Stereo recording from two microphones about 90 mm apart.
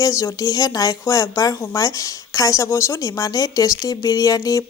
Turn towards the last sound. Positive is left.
turn(degrees=40)  # may be behind; listen again after turning